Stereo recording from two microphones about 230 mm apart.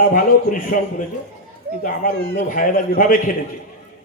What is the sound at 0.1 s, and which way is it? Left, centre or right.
A man's voice, left.